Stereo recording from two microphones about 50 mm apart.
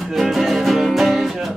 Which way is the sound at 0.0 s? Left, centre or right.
Centre.